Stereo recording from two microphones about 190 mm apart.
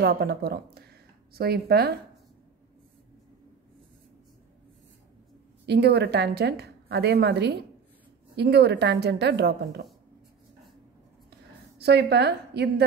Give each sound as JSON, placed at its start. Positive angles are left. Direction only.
{"t": 0.0, "sound": "a woman's voice", "side_deg": -60}
{"t": 5.7, "sound": "a woman's voice", "side_deg": -60}
{"t": 11.8, "sound": "a woman's voice", "side_deg": -60}